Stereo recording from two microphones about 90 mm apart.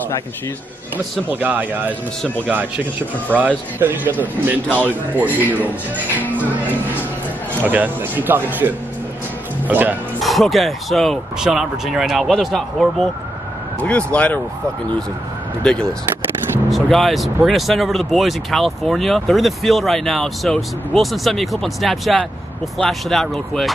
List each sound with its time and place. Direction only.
1.3 s speech: 20° right (ahead or behind)
6.1 s music: 20° left (ahead or behind)
7.6 s speech: 20° right (ahead or behind)
10.2 s speech: centre (ahead or behind)
13.7 s speech: 15° left (ahead or behind)
15.6 s speech: 10° left (ahead or behind)